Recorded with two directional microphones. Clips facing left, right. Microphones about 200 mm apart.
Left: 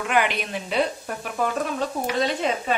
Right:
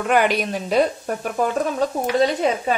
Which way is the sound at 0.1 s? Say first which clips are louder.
Right 5 dB; 45° right (ahead or behind).